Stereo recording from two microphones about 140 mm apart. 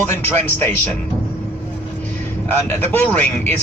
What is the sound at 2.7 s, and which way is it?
Speech, 15° left (ahead or behind).